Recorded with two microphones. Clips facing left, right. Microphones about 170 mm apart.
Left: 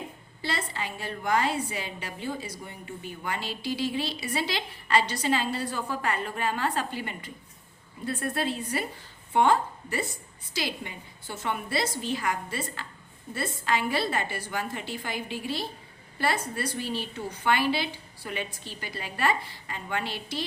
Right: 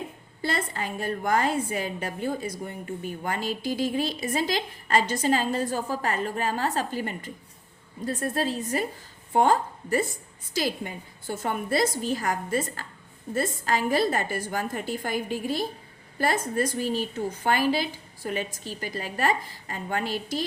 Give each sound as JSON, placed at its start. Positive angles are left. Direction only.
{"t": 0.4, "sound": "a woman's voice", "side_deg": -50}